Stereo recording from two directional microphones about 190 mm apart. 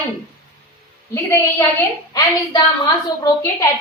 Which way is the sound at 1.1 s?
15° left (ahead or behind).